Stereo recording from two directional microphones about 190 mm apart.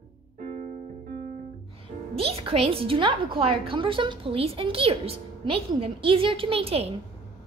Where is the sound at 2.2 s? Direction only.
30° right (ahead or behind).